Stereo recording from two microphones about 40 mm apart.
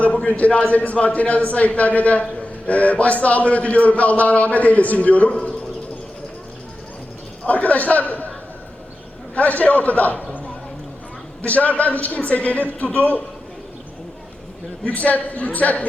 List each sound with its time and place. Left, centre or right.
0.3 s a man's voice: left
5.3 s a man's voice: left
7.4 s a man's voice: left
9.3 s a man's voice: left
11.4 s a man's voice: left
14.8 s a man's voice: left